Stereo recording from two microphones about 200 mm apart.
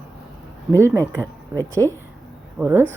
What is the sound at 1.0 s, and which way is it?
Speech, 15° right (ahead or behind).